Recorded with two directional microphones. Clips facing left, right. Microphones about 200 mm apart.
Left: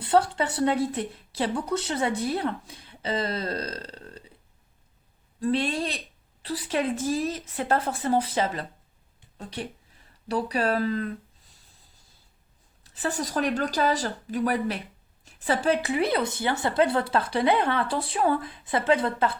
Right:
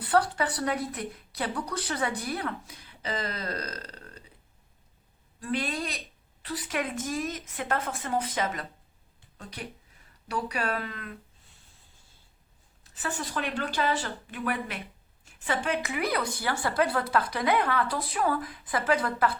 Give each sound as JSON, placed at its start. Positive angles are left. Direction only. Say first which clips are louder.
{"t": 0.0, "sound": "speech", "louder": "left 3 dB", "side_deg": 25}
{"t": 5.4, "sound": "speech", "louder": "left 5 dB", "side_deg": 30}
{"t": 12.8, "sound": "speech", "louder": "left 5 dB", "side_deg": 35}